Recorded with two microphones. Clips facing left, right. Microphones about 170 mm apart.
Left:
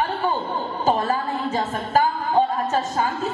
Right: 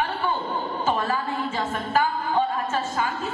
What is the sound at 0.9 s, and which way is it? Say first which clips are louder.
A woman's voice: left 4 dB; 40° left (ahead or behind).